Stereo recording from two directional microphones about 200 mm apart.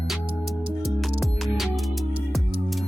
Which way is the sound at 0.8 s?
Centre (ahead or behind).